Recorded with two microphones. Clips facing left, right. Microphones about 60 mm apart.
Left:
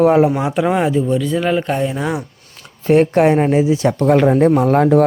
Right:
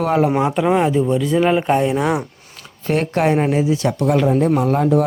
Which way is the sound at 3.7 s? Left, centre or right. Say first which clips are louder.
Left 4 dB; left.